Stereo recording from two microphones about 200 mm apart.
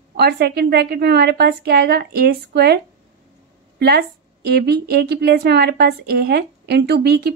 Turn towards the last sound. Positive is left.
turn(degrees=-55)  # may be behind; listen again after turning